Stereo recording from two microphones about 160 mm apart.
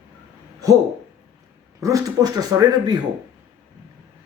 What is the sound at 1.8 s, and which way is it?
Speech, 20° right (ahead or behind).